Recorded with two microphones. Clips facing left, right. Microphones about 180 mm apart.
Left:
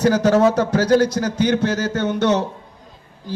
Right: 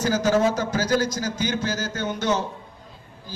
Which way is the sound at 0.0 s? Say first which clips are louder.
Left 6 dB; 65° left (ahead or behind).